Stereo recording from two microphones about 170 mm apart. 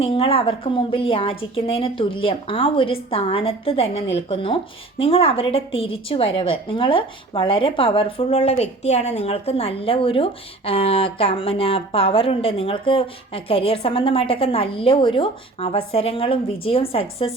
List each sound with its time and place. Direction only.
0.0 s a woman's voice: 35° left (ahead or behind)